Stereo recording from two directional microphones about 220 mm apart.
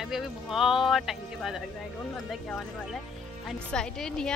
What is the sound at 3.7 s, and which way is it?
Speech, 5° left (ahead or behind).